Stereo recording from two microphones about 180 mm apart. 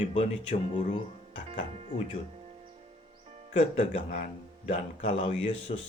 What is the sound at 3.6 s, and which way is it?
A man's voice, 35° left (ahead or behind).